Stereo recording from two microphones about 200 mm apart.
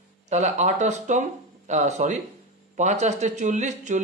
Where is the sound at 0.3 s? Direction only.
35° right (ahead or behind).